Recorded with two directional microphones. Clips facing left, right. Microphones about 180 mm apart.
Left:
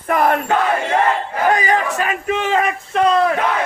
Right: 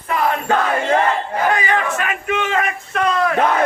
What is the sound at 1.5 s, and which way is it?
A man's voice, 40° left (ahead or behind).